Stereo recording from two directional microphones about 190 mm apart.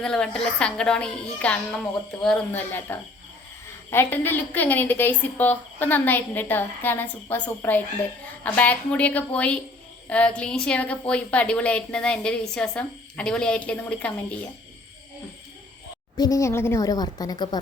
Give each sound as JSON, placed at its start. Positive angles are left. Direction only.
{"t": 0.0, "sound": "a woman's voice", "side_deg": 5}
{"t": 16.1, "sound": "a woman's voice", "side_deg": 20}